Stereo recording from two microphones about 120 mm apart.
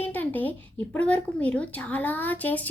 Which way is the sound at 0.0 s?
15° left (ahead or behind).